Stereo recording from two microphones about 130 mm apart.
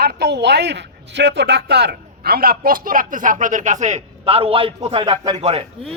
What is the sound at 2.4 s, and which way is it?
Speech, 90° right.